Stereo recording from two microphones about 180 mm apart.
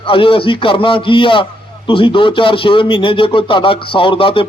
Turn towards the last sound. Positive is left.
turn(degrees=30)  # may be behind; listen again after turning